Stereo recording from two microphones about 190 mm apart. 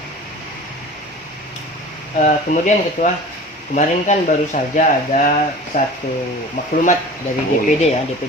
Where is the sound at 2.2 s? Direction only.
40° left (ahead or behind).